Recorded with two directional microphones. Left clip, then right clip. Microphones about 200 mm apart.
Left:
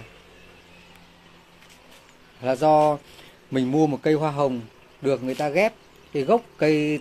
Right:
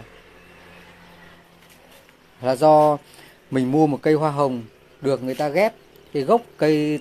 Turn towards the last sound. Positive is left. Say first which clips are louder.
# right 2 dB
turn(degrees=-10)  # may be behind; listen again after turning